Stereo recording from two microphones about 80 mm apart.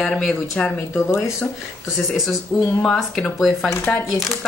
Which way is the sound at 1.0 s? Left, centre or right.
Left.